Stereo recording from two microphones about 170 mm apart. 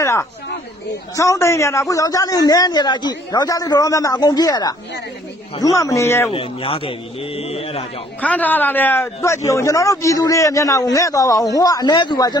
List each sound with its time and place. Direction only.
0.0 s a sound: 15° left (ahead or behind)
1.1 s a man's voice: 20° left (ahead or behind)
6.3 s a man's voice: 35° left (ahead or behind)
8.2 s a man's voice: 10° left (ahead or behind)